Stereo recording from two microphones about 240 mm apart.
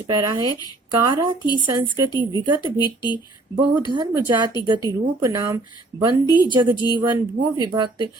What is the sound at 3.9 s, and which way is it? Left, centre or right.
Speech, centre.